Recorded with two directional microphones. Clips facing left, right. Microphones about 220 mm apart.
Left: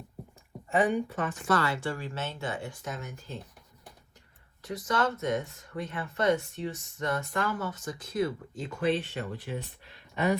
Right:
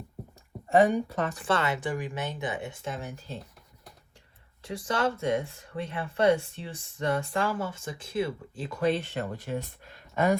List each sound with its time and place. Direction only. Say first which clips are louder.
0.8 s speech: right 4 dB; 40° right (ahead or behind)
4.6 s speech: right 1 dB; 30° right (ahead or behind); by 10.3 s 45° right (ahead or behind)